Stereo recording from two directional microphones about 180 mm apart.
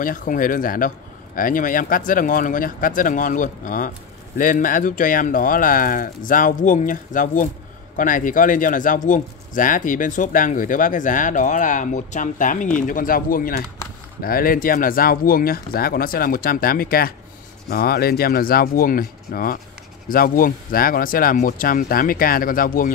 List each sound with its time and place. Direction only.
0.0 s speech: 50° left (ahead or behind)